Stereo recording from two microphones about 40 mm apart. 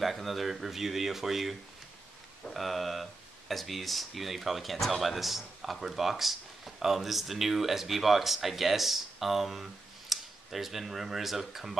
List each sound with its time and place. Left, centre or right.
0.0 s speech: centre